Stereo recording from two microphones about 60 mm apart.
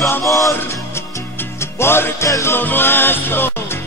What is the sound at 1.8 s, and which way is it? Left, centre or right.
Music, left.